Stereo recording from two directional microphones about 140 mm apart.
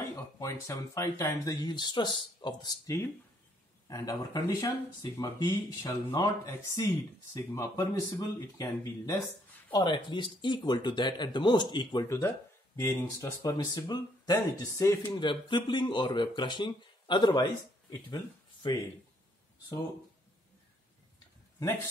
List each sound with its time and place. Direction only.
0.4 s speech: 20° left (ahead or behind)
3.8 s speech: 25° left (ahead or behind)
15.2 s speech: 35° left (ahead or behind)